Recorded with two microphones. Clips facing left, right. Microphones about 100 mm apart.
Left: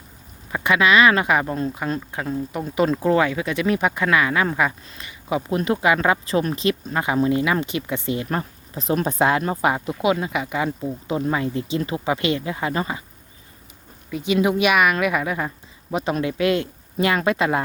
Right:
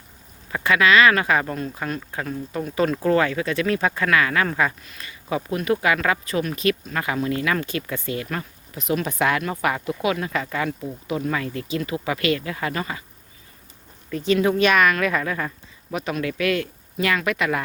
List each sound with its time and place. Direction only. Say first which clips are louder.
0.5 s speech: even; 20° left (ahead or behind)
8.3 s speech: left 4 dB; 35° left (ahead or behind)
14.1 s speech: even; 10° left (ahead or behind); by 17.6 s 30° left (ahead or behind)